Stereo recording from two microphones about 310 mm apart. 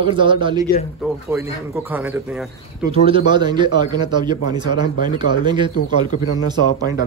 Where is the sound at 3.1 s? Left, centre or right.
Centre.